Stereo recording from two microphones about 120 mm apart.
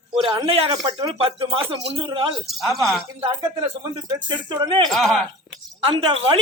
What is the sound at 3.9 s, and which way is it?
Speech, 40° right (ahead or behind).